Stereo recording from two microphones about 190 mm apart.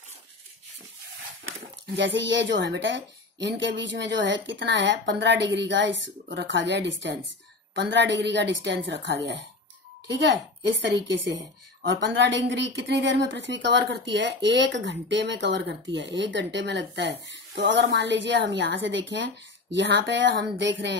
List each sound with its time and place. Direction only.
2.0 s a woman's voice: 70° right (ahead or behind)
10.6 s a woman's voice: 70° right (ahead or behind)